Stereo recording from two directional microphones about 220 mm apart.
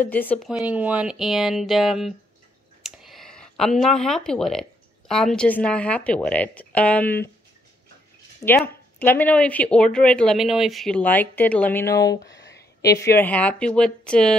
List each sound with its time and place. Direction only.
0.0 s speech: 10° left (ahead or behind)
0.5 s speech: 5° right (ahead or behind)
8.4 s speech: 15° left (ahead or behind)
12.4 s a sound: 50° left (ahead or behind)
12.9 s speech: 10° left (ahead or behind)